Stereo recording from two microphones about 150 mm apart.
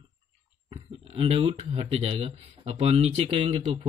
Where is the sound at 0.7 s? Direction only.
40° right (ahead or behind).